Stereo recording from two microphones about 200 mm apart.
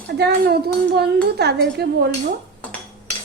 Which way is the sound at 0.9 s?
55° right (ahead or behind).